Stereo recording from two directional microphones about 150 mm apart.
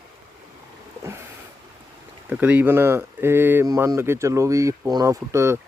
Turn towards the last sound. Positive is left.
turn(degrees=-20)  # may be behind; listen again after turning